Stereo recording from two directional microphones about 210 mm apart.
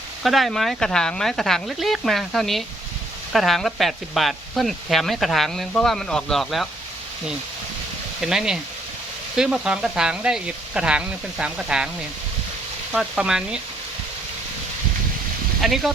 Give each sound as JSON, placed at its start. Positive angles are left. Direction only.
{"t": 0.2, "sound": "speech", "side_deg": 0}
{"t": 8.2, "sound": "speech", "side_deg": 0}
{"t": 12.9, "sound": "speech", "side_deg": 0}
{"t": 15.6, "sound": "speech", "side_deg": 0}